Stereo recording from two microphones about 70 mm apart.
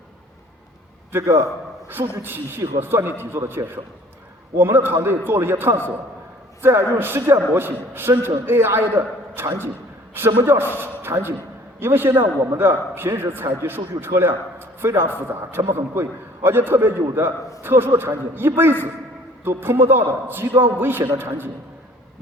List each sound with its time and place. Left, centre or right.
1.1 s a man's voice: right
1.9 s a man's voice: right